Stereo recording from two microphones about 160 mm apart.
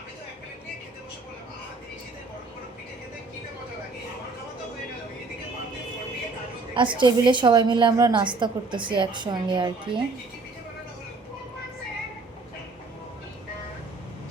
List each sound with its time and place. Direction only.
6.7 s a woman's voice: 30° right (ahead or behind)